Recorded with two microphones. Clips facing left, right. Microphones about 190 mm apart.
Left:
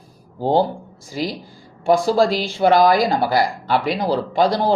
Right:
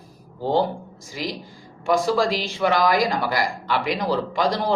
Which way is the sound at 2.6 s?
35° left (ahead or behind).